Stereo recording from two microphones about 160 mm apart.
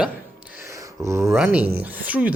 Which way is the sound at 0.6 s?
20° right (ahead or behind).